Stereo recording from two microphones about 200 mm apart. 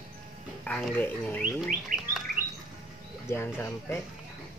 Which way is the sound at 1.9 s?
45° right (ahead or behind).